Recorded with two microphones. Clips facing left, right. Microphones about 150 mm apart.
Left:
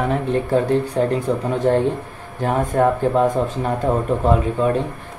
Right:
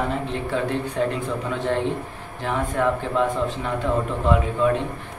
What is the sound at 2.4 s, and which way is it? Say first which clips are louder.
Speech: left 5 dB; 45° left (ahead or behind).